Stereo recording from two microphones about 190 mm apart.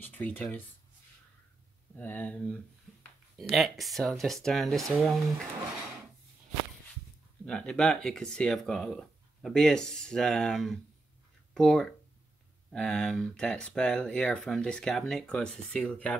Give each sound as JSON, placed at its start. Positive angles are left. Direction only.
{"t": 0.0, "sound": "speech", "side_deg": 10}
{"t": 2.0, "sound": "a sound", "side_deg": 10}
{"t": 3.5, "sound": "speech", "side_deg": 0}
{"t": 7.4, "sound": "speech", "side_deg": 5}